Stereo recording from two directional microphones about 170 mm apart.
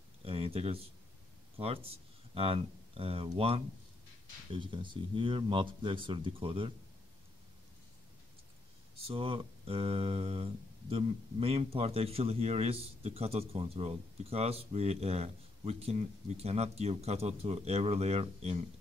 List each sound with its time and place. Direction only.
0.2 s a sound: 35° right (ahead or behind)
1.6 s speech: 35° right (ahead or behind)
8.9 s speech: 35° right (ahead or behind)